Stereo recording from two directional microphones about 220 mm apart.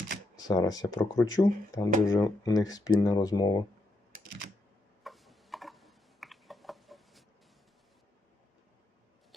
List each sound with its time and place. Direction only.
0.3 s speech: 15° left (ahead or behind)
5.0 s tick-tock: centre (ahead or behind)